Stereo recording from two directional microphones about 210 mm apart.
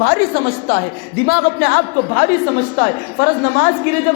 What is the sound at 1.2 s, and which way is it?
A woman's voice, 45° left (ahead or behind).